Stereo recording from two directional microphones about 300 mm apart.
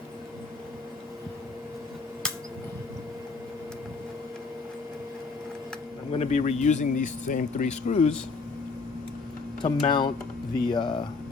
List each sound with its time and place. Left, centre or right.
6.1 s speech: left
9.6 s speech: centre